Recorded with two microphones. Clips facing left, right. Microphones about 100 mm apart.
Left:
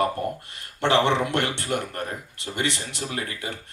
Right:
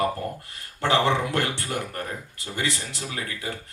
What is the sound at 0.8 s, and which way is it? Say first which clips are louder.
A man's voice: left 1 dB; 25° left (ahead or behind).